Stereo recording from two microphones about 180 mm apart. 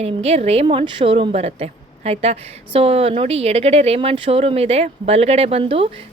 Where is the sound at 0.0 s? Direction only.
35° right (ahead or behind).